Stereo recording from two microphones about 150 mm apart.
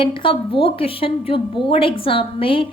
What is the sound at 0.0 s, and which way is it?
A woman's voice, 35° left (ahead or behind).